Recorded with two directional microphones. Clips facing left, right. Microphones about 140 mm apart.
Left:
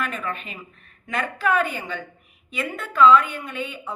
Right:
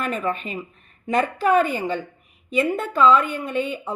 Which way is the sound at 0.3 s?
40° right (ahead or behind).